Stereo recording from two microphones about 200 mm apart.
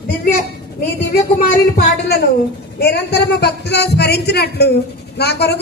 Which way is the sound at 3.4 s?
55° left (ahead or behind).